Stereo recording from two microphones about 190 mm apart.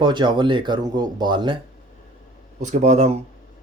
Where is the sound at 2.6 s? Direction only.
40° right (ahead or behind).